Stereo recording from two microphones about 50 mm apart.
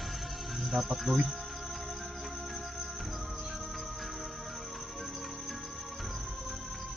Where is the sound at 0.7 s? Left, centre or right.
Centre.